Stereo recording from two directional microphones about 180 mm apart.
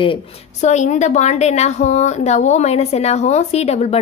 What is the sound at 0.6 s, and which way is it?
A woman's voice, 40° left (ahead or behind).